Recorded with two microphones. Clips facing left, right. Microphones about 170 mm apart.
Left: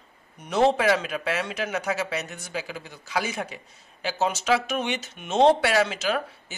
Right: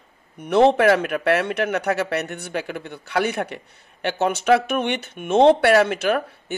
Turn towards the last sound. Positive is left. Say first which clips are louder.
# right 5 dB
turn(degrees=-60)  # may be behind; listen again after turning